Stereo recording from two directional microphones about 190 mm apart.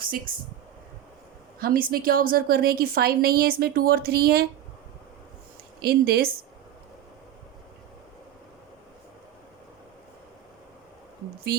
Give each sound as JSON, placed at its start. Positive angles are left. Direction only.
{"t": 0.0, "sound": "speech", "side_deg": -50}
{"t": 1.5, "sound": "a woman's voice", "side_deg": -50}
{"t": 5.8, "sound": "speech", "side_deg": -55}